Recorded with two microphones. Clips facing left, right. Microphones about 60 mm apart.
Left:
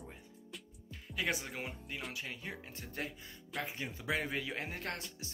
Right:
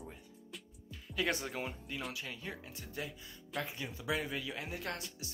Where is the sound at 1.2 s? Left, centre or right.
Centre.